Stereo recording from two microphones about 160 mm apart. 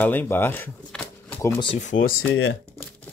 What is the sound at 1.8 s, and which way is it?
Speech, 55° left (ahead or behind).